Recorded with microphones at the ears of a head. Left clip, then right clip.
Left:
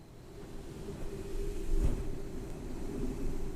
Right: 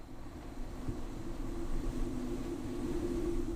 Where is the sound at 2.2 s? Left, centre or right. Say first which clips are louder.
Right 5 dB; right.